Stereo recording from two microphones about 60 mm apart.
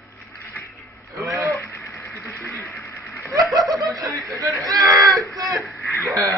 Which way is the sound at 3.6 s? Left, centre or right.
Right.